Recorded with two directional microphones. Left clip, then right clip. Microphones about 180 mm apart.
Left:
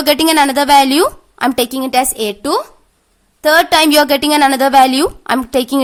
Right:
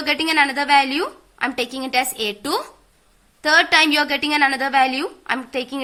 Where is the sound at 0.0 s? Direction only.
90° left; by 2.6 s 50° left (ahead or behind).